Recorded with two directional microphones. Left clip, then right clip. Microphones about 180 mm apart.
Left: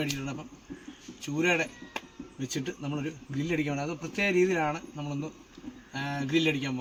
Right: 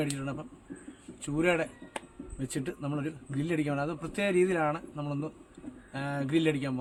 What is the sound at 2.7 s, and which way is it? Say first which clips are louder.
A man's voice: even; 5° right (ahead or behind).